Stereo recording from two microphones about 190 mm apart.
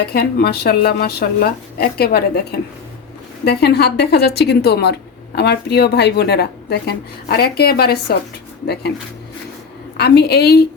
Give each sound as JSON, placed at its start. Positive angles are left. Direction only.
{"t": 0.0, "sound": "a woman's voice", "side_deg": 55}
{"t": 10.0, "sound": "a woman's voice", "side_deg": 60}